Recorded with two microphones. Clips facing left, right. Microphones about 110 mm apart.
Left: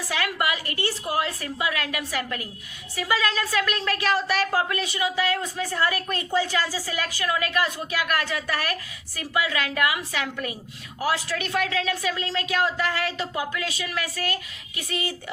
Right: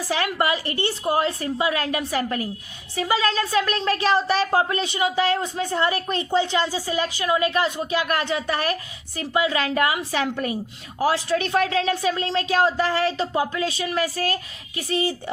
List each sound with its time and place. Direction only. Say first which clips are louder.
0.1 s a woman's voice: right 4 dB; 30° right (ahead or behind)